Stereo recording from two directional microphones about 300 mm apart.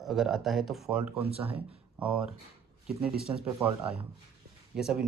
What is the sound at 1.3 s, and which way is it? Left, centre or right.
Speech, centre.